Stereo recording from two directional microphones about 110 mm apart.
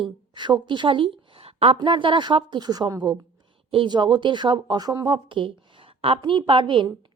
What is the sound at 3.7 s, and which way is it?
Speech, 45° right (ahead or behind).